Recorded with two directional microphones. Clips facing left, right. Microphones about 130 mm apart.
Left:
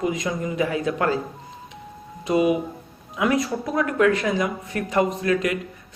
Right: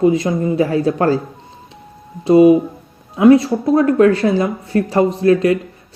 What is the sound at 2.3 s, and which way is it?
Speech, 30° right (ahead or behind).